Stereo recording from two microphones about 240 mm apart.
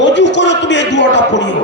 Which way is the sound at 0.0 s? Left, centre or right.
Left.